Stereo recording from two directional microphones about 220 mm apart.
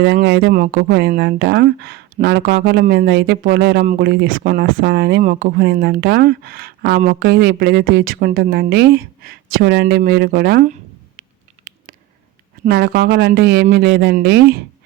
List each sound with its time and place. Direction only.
0.0 s speech: 50° right (ahead or behind)
11.2 s patter: 40° right (ahead or behind)
12.6 s speech: 45° right (ahead or behind)